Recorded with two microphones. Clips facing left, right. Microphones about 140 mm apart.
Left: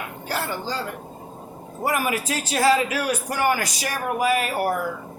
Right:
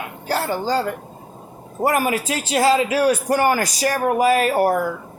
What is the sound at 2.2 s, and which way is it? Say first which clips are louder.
Speech: right 2 dB; 25° right (ahead or behind).